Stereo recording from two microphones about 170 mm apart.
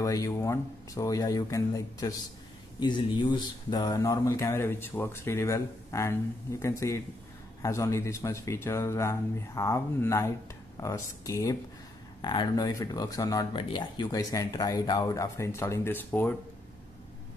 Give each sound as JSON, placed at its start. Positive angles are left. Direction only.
{"t": 0.0, "sound": "speech", "side_deg": 20}